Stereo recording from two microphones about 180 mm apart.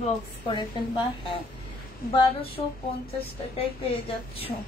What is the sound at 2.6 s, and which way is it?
Speech, 30° left (ahead or behind).